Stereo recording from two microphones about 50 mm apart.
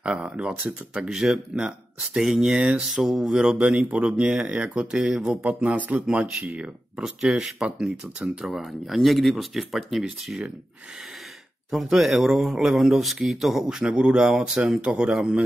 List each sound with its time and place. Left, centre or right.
0.0 s speech: right
1.0 s speech: centre; by 4.8 s right
4.9 s speech: centre
5.4 s speech: right
6.0 s speech: centre
7.0 s speech: centre
7.6 s speech: right
8.5 s speech: centre
11.7 s speech: centre